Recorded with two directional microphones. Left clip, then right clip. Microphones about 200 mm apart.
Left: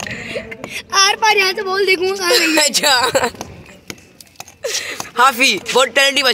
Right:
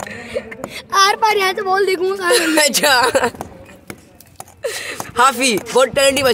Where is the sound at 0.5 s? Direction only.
5° left (ahead or behind).